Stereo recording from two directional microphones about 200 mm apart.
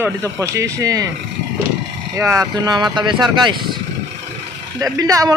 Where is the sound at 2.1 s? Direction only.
15° right (ahead or behind).